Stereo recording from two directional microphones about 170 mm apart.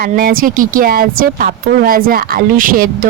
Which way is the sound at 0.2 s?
55° right (ahead or behind).